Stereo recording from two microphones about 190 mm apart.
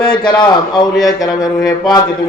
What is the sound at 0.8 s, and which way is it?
Music, 20° left (ahead or behind).